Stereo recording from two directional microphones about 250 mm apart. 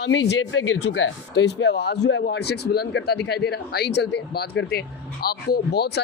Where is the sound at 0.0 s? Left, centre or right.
Left.